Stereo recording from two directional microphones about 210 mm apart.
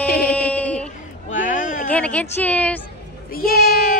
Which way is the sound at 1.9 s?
5° left (ahead or behind).